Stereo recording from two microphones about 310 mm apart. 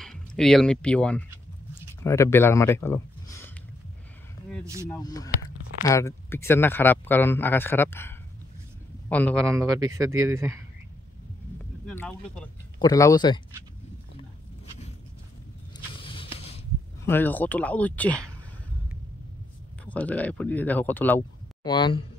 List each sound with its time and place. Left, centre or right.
0.0 s speech: centre
4.8 s speech: centre
9.4 s speech: centre
11.8 s speech: centre
16.0 s a sound: centre
17.0 s speech: centre
19.8 s speech: centre